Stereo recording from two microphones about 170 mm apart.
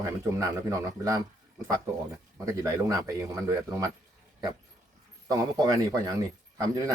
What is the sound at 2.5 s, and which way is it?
Speech, 20° right (ahead or behind).